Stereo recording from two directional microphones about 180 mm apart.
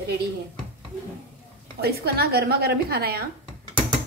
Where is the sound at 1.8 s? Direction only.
60° right (ahead or behind).